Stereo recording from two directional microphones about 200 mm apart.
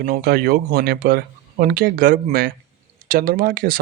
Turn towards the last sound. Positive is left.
turn(degrees=-50)  # may be behind; listen again after turning